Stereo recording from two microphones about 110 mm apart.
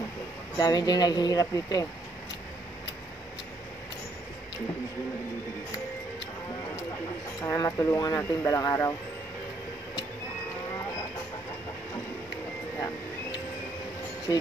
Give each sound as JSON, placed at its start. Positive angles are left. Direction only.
{"t": 0.6, "sound": "speech", "side_deg": 40}
{"t": 7.4, "sound": "speech", "side_deg": 30}